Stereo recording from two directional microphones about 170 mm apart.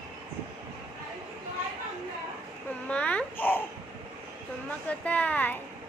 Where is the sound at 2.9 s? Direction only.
5° left (ahead or behind).